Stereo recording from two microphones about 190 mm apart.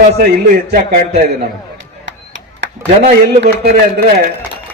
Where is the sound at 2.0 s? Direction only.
75° right (ahead or behind).